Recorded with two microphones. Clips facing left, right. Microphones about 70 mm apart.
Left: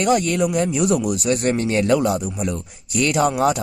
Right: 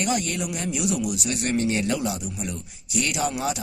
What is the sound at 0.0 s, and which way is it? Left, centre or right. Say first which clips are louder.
Speech: left 8 dB; left.